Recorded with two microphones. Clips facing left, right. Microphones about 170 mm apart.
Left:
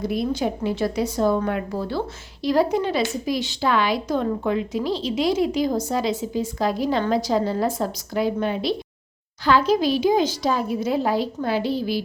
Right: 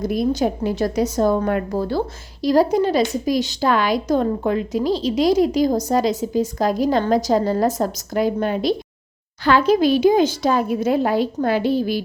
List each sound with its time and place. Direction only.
0.0 s a woman's voice: 45° right (ahead or behind)
9.4 s a woman's voice: 60° right (ahead or behind)